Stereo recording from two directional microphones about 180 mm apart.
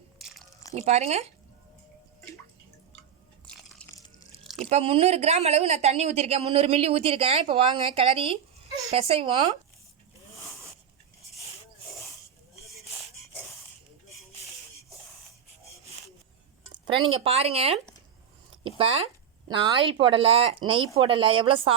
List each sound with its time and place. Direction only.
0.2 s biting: centre (ahead or behind)
0.9 s speech: 35° right (ahead or behind)
3.4 s biting: centre (ahead or behind)
4.4 s a sound: centre (ahead or behind)
4.7 s speech: 35° right (ahead or behind)
16.8 s speech: 25° right (ahead or behind)